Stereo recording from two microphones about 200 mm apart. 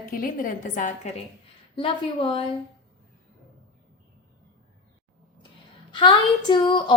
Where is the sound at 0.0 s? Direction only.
45° left (ahead or behind).